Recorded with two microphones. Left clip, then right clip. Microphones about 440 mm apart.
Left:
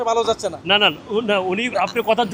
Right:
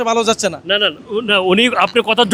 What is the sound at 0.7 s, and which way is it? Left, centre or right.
Speech, centre.